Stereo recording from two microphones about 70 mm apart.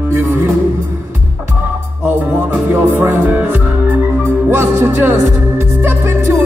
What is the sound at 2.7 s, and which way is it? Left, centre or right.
Music, right.